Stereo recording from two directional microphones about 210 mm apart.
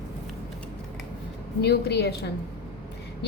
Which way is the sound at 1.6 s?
50° left (ahead or behind).